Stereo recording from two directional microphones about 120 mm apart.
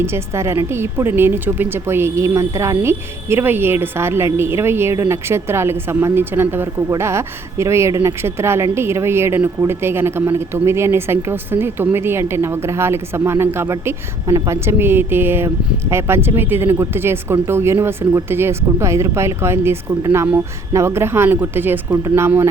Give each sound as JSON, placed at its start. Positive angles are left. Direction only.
{"t": 0.0, "sound": "speech", "side_deg": -20}